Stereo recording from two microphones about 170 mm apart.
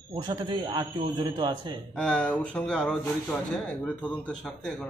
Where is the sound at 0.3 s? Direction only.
25° right (ahead or behind).